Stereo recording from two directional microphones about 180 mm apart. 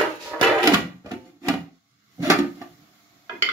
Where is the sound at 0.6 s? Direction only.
20° right (ahead or behind).